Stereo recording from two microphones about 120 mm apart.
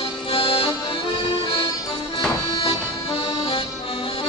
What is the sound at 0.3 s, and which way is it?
Accordion, 50° left (ahead or behind).